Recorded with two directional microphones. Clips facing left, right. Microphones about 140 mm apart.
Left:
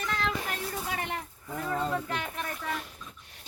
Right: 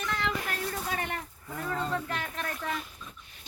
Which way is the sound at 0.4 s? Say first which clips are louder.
Right 1 dB; 15° left (ahead or behind).